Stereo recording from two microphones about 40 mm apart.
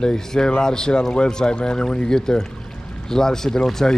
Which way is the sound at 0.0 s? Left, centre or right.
Centre.